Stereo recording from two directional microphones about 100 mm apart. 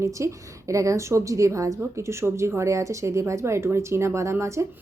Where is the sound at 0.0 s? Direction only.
30° right (ahead or behind).